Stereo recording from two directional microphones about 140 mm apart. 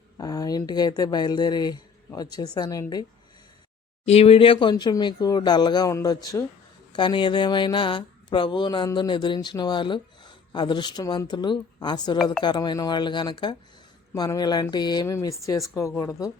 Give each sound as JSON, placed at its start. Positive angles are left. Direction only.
{"t": 0.2, "sound": "speech", "side_deg": 25}
{"t": 4.0, "sound": "speech", "side_deg": 45}